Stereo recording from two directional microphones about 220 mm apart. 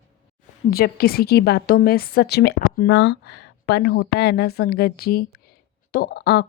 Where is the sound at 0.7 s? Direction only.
45° left (ahead or behind).